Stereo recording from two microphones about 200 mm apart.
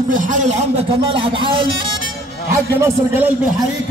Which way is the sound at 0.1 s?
40° right (ahead or behind).